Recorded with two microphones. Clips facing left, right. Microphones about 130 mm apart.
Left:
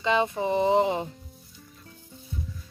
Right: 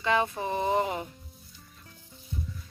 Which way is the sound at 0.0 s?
20° left (ahead or behind).